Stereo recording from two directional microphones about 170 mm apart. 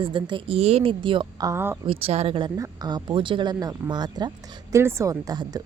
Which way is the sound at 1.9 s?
35° right (ahead or behind).